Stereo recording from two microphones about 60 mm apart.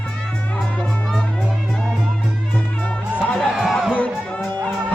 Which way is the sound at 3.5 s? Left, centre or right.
Centre.